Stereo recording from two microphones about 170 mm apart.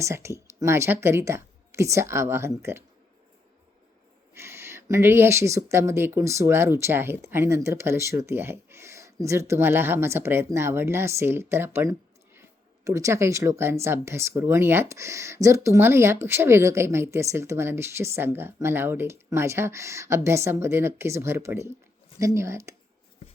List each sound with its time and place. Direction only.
0.0 s speech: 15° right (ahead or behind)
4.4 s speech: 15° right (ahead or behind)